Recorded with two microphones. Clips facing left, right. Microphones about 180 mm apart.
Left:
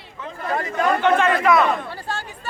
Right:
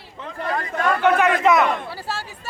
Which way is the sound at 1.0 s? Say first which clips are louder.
Right 3 dB; 10° right (ahead or behind).